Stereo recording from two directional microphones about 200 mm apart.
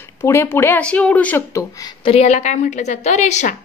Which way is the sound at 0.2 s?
10° left (ahead or behind).